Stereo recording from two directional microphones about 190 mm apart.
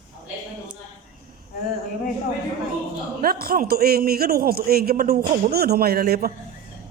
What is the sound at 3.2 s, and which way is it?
A man's voice, 50° right (ahead or behind).